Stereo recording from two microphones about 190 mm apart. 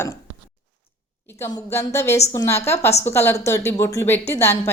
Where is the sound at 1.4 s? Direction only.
15° left (ahead or behind).